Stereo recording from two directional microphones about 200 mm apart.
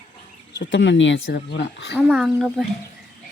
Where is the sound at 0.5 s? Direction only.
65° left (ahead or behind).